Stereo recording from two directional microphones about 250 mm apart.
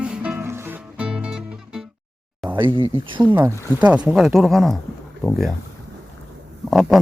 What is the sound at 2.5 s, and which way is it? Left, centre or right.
Speech, centre.